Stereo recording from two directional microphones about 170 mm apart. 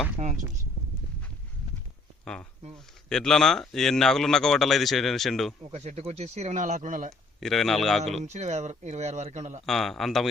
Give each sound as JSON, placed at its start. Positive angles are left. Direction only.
{"t": 2.2, "sound": "speech", "side_deg": 5}
{"t": 5.7, "sound": "speech", "side_deg": -40}
{"t": 7.3, "sound": "speech", "side_deg": 0}
{"t": 8.2, "sound": "speech", "side_deg": -45}
{"t": 9.6, "sound": "speech", "side_deg": 0}